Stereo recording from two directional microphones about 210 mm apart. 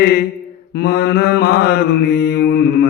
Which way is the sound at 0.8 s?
50° left (ahead or behind).